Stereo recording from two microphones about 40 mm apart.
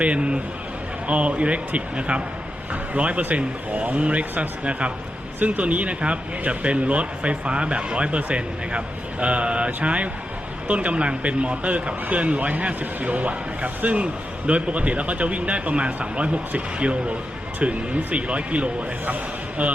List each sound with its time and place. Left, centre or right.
0.0 s a man's voice: right